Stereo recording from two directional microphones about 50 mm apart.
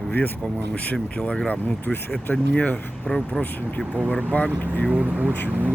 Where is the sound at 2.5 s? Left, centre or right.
Left.